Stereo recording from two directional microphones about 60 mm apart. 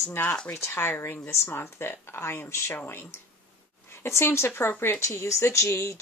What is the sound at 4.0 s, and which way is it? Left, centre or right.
Speech, left.